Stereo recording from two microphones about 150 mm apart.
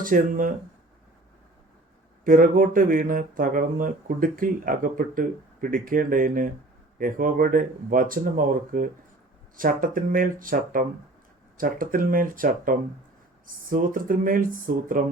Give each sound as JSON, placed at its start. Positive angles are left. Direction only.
{"t": 0.0, "sound": "speech", "side_deg": -65}
{"t": 2.2, "sound": "speech", "side_deg": -65}